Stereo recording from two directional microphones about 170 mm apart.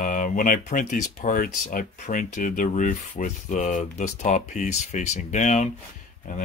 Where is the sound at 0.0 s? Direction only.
50° left (ahead or behind).